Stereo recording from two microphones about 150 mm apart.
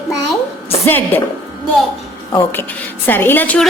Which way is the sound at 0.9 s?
10° left (ahead or behind).